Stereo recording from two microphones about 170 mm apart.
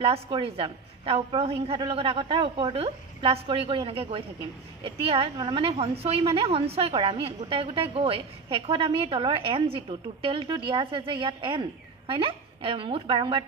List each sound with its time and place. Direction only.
0.0 s a woman's voice: 35° right (ahead or behind)